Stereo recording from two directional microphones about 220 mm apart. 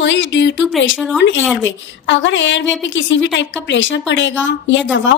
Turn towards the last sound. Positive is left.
turn(degrees=55)  # may be behind; listen again after turning